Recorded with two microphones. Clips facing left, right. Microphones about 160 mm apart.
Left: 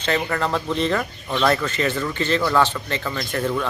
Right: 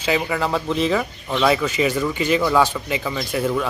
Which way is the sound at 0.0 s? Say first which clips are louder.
Right 1 dB; 5° right (ahead or behind).